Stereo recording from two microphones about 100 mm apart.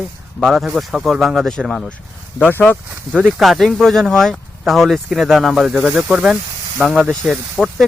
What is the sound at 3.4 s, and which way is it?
Speech, centre (ahead or behind).